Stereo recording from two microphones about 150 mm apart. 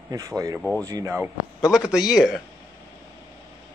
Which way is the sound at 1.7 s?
5° right (ahead or behind).